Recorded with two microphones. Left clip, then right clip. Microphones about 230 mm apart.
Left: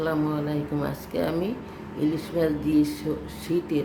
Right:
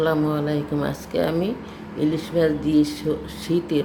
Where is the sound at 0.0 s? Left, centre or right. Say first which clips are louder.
Right 5 dB; centre.